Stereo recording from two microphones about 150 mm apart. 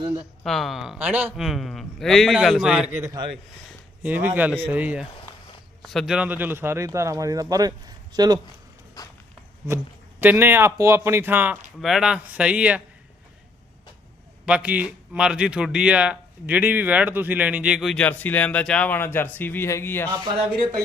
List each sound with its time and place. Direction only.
0.4 s a man's voice: centre (ahead or behind)
3.0 s a man's voice: 25° right (ahead or behind)
3.7 s speech: 10° right (ahead or behind)
5.8 s speech: centre (ahead or behind); by 8.4 s 25° right (ahead or behind)
9.0 s walk: 25° left (ahead or behind)
9.6 s speech: 15° right (ahead or behind)
11.8 s speech: centre (ahead or behind)
14.4 s a man's voice: 10° right (ahead or behind); by 20.1 s 15° left (ahead or behind)